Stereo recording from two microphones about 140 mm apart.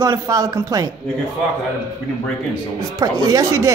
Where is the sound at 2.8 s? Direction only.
25° right (ahead or behind).